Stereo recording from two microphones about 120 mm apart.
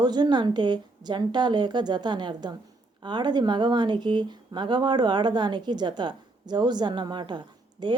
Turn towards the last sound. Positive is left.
turn(degrees=-40)  # may be behind; listen again after turning